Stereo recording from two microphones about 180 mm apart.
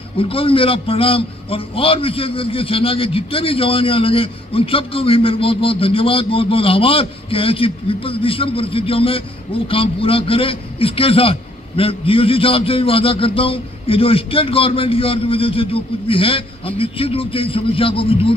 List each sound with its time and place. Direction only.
0.2 s a man's voice: 30° left (ahead or behind)